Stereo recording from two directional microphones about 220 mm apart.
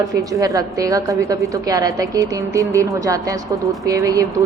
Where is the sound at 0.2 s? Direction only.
15° right (ahead or behind).